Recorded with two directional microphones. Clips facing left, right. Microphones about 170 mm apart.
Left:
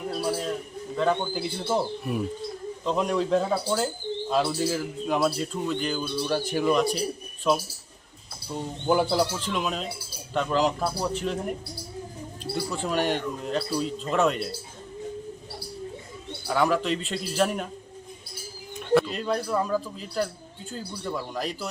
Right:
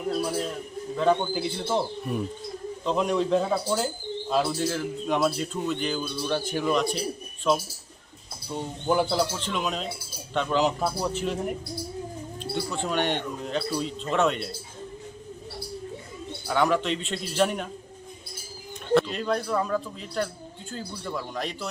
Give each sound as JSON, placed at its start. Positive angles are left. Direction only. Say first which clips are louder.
{"t": 0.9, "sound": "a man's voice", "louder": "right 2 dB", "side_deg": 0}
{"t": 8.9, "sound": "a man's voice", "louder": "left 1 dB", "side_deg": 0}
{"t": 16.5, "sound": "a man's voice", "louder": "even", "side_deg": 5}
{"t": 18.9, "sound": "a man's voice", "louder": "even", "side_deg": 0}